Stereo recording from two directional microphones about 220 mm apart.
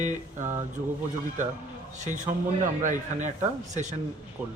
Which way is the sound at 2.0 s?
35° right (ahead or behind).